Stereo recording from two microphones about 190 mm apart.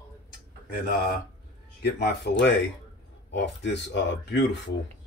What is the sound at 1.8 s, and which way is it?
A man's voice, 60° left (ahead or behind).